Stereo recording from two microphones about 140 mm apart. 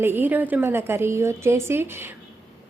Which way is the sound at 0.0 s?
15° right (ahead or behind).